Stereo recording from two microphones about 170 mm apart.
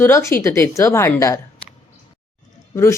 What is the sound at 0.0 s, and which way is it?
A woman's voice, 15° left (ahead or behind).